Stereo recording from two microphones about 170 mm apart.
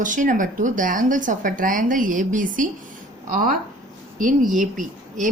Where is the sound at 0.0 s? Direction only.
50° right (ahead or behind).